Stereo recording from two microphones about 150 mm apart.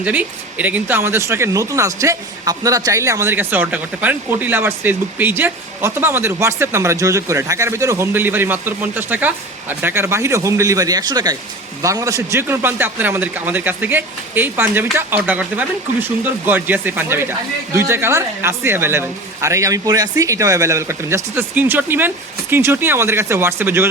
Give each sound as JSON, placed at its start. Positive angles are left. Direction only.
{"t": 0.0, "sound": "speech", "side_deg": -10}